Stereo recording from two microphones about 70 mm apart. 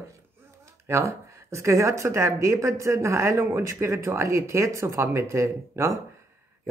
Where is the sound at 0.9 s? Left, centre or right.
Right.